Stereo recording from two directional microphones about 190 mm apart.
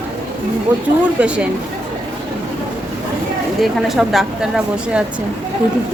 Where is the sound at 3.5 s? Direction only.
Centre (ahead or behind).